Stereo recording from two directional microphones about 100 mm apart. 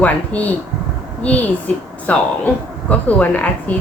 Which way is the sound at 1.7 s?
15° left (ahead or behind).